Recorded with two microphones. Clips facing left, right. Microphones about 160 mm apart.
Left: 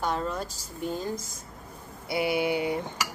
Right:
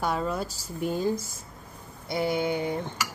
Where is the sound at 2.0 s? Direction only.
10° left (ahead or behind).